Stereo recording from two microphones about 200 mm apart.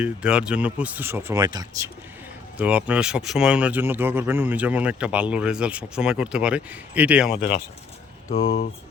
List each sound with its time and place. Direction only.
0.0 s speech: 5° right (ahead or behind)
2.6 s speech: 5° right (ahead or behind)
7.3 s speech: 25° left (ahead or behind)